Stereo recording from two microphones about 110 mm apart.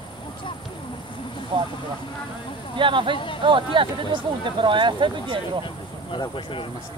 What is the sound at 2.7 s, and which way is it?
Speech, 50° right (ahead or behind).